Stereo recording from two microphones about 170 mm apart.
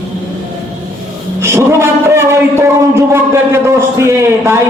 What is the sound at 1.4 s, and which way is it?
A man's voice, 15° right (ahead or behind).